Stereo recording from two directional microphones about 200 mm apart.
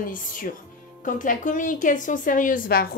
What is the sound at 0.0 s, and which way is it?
Speech, 45° left (ahead or behind).